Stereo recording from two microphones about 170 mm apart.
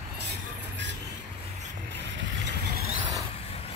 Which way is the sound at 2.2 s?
90° right.